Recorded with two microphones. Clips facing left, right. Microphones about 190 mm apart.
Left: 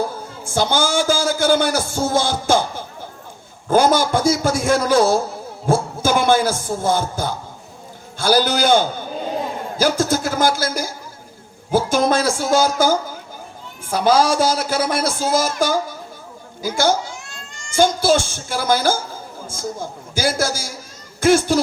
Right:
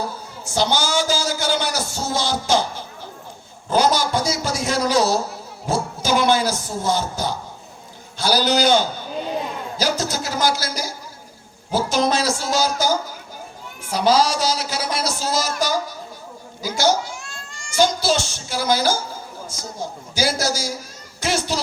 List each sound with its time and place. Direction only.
0.4 s a man's voice: 50° left (ahead or behind)
17.2 s a sound: 20° left (ahead or behind)
17.7 s a man's voice: 50° left (ahead or behind)